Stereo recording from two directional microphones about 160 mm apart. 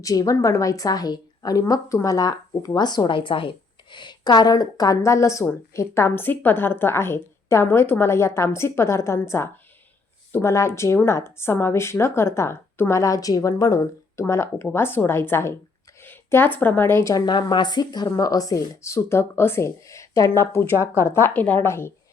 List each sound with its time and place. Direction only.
0.0 s a woman's voice: 20° left (ahead or behind)